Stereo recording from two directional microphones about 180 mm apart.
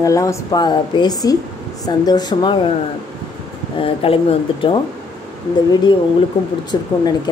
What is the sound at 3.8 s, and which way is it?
Speech, 30° left (ahead or behind).